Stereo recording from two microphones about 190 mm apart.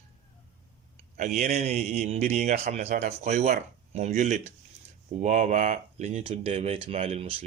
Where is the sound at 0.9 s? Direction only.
40° right (ahead or behind).